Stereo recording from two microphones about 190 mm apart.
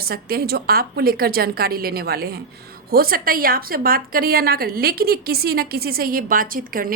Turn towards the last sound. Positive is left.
turn(degrees=-50)  # may be behind; listen again after turning